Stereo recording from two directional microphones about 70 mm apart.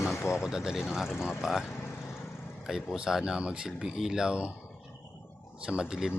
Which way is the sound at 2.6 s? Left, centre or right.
Centre.